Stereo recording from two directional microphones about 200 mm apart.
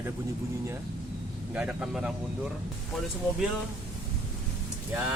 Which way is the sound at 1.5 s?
5° right (ahead or behind).